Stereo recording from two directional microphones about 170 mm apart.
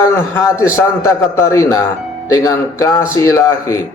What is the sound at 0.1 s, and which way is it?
A man's voice, 15° left (ahead or behind).